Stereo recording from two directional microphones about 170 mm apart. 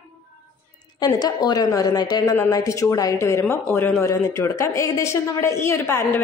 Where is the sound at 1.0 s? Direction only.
25° left (ahead or behind).